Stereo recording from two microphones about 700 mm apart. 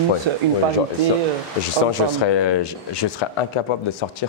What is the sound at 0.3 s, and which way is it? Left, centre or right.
Speech, right.